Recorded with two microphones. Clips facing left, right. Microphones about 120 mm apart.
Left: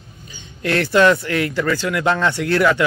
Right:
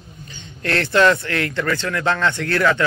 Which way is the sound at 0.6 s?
15° left (ahead or behind).